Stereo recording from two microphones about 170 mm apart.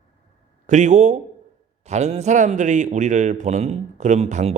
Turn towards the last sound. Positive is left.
turn(degrees=-40)  # may be behind; listen again after turning